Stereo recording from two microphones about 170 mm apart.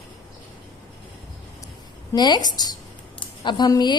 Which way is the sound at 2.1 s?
25° left (ahead or behind).